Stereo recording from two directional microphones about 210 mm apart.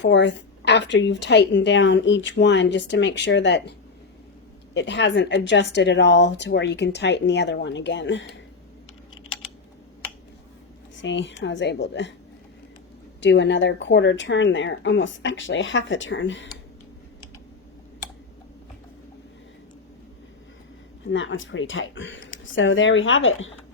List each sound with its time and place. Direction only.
0.0 s a woman's voice: 55° left (ahead or behind)
11.0 s a woman's voice: 60° left (ahead or behind)
13.2 s a woman's voice: 60° left (ahead or behind)
21.1 s a woman's voice: 65° left (ahead or behind)